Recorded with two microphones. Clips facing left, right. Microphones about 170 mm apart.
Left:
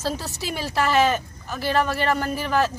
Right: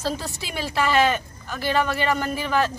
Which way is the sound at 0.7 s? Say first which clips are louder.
Even; 5° left (ahead or behind).